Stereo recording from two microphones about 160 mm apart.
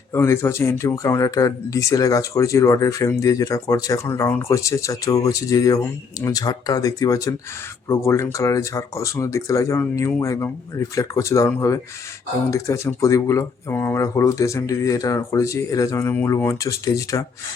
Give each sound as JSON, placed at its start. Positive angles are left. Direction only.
{"t": 0.1, "sound": "speech", "side_deg": 15}